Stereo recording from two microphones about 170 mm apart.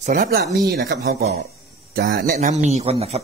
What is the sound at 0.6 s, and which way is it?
Speech, 75° right (ahead or behind).